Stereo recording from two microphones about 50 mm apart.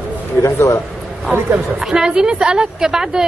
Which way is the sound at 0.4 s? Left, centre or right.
Left.